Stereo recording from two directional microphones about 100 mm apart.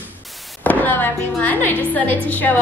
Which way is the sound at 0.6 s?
15° left (ahead or behind).